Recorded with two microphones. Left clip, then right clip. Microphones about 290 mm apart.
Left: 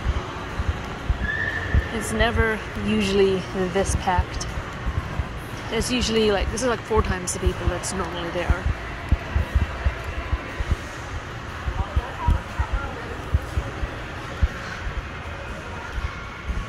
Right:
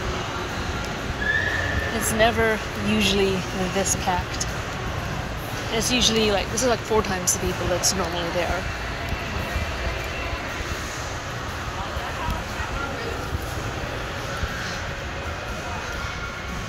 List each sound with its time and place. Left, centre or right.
2.1 s speech: centre
5.8 s speech: centre